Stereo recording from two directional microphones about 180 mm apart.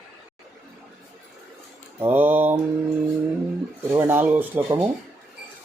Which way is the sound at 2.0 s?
10° right (ahead or behind).